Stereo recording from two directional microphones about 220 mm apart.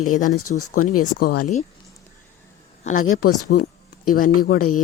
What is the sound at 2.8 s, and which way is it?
Speech, 35° left (ahead or behind).